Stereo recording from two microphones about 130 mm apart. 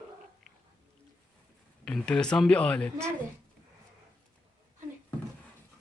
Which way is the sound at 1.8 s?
5° left (ahead or behind).